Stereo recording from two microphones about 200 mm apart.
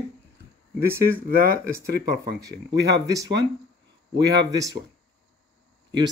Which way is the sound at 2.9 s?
15° right (ahead or behind).